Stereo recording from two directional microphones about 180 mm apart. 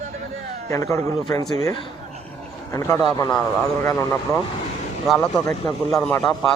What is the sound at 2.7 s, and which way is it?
Speech, 15° left (ahead or behind).